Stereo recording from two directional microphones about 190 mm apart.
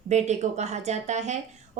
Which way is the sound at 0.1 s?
35° right (ahead or behind).